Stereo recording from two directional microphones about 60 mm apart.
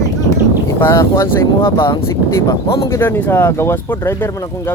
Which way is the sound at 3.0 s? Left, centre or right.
Left.